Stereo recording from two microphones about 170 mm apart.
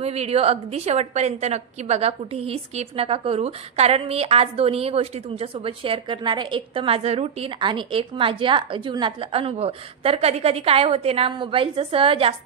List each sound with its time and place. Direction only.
0.0 s a woman's voice: 40° right (ahead or behind)